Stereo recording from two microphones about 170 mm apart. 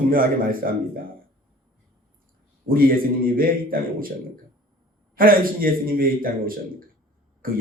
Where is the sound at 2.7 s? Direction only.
60° right (ahead or behind).